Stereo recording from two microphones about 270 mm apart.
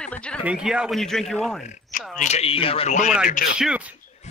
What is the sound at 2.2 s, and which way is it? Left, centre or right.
Speech, left.